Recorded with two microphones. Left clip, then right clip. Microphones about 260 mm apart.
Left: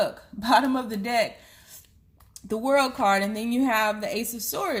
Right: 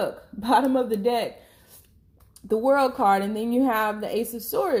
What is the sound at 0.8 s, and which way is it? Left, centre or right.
Speech, left.